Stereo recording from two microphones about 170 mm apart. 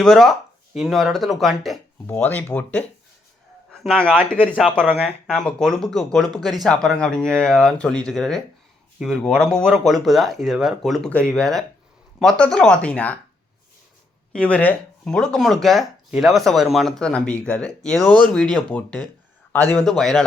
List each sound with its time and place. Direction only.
0.0 s speech: centre (ahead or behind)
2.0 s speech: 10° left (ahead or behind)
14.3 s speech: 5° left (ahead or behind)